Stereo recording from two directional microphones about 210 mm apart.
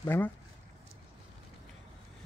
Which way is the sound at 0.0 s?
10° left (ahead or behind).